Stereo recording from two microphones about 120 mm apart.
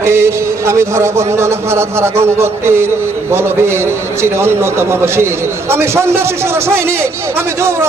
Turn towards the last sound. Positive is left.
turn(degrees=-20)  # may be behind; listen again after turning